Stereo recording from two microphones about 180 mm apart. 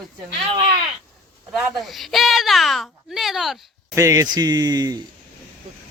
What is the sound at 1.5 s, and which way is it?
Speech, centre (ahead or behind).